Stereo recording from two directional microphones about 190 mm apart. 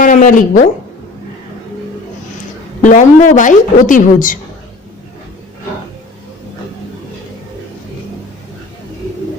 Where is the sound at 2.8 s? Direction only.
40° left (ahead or behind).